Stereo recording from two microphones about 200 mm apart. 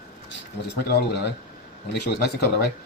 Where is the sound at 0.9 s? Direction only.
55° left (ahead or behind).